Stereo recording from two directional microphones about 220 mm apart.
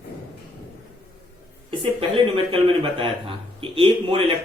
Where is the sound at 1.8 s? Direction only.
25° right (ahead or behind).